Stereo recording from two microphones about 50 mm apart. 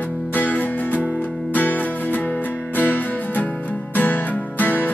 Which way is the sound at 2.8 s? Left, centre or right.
Left.